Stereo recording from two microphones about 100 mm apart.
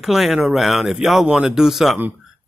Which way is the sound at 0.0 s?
Centre (ahead or behind).